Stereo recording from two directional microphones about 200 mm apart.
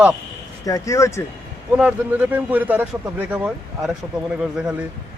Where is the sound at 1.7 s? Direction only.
5° right (ahead or behind).